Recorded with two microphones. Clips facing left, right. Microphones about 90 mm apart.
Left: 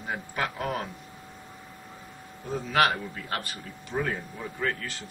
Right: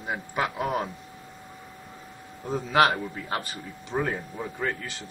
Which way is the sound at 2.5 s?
20° right (ahead or behind).